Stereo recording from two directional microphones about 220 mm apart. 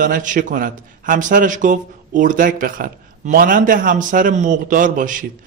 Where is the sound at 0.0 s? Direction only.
35° right (ahead or behind).